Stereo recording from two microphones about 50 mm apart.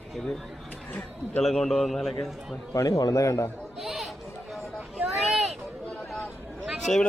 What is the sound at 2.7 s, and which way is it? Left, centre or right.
Speech, left.